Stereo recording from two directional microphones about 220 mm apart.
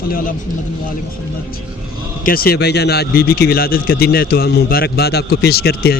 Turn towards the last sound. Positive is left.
turn(degrees=45)  # may be behind; listen again after turning